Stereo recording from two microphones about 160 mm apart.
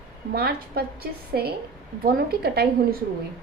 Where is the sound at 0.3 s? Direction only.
75° right (ahead or behind).